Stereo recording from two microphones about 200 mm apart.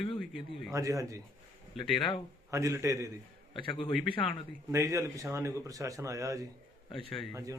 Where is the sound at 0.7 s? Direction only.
15° right (ahead or behind).